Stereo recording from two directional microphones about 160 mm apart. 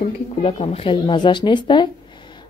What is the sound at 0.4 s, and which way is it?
A woman's voice, 35° left (ahead or behind).